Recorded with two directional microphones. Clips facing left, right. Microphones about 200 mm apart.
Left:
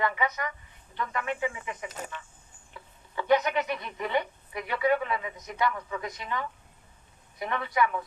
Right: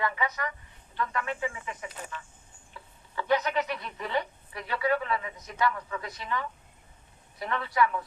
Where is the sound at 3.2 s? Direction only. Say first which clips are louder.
Left 2 dB; 20° left (ahead or behind).